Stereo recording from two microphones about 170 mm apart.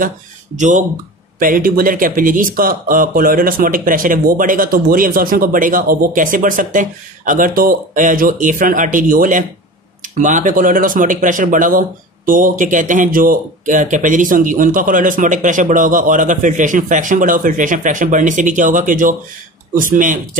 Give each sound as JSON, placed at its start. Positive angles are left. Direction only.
{"t": 0.6, "sound": "speech", "side_deg": -45}
{"t": 1.4, "sound": "speech", "side_deg": -55}